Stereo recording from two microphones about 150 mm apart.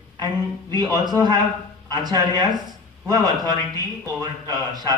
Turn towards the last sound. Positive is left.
turn(degrees=-25)  # may be behind; listen again after turning